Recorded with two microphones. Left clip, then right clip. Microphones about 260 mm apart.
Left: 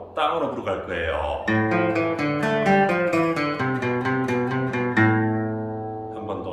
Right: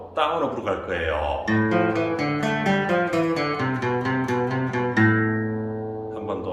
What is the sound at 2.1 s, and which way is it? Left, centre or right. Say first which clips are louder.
Music: left 1 dB; centre.